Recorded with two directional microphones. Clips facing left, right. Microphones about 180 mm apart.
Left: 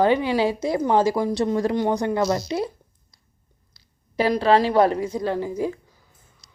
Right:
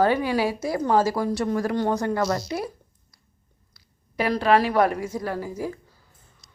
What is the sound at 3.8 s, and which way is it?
A woman's voice, 30° left (ahead or behind).